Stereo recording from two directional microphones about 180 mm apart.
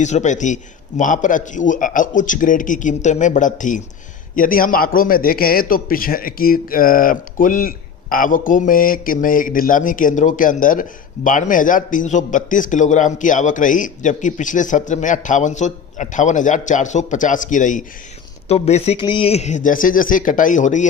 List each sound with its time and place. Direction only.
0.0 s a man's voice: 40° left (ahead or behind)